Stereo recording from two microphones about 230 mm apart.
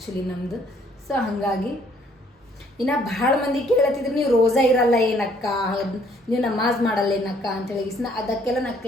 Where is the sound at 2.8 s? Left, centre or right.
Centre.